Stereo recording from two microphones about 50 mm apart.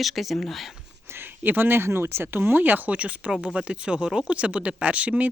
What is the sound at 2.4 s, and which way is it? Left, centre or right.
Speech, right.